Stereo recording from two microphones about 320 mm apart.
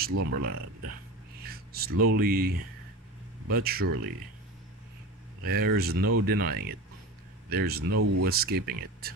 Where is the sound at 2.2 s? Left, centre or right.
Right.